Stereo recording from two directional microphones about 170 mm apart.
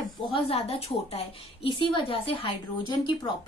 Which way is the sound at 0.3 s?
35° left (ahead or behind).